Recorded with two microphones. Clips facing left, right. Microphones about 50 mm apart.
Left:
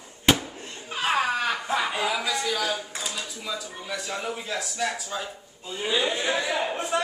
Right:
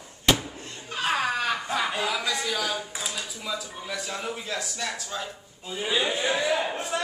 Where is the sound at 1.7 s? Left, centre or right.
Centre.